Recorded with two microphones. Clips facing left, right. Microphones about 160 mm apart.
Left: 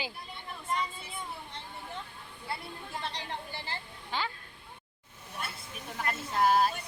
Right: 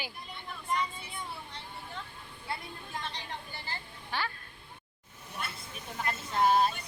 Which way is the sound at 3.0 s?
30° left (ahead or behind).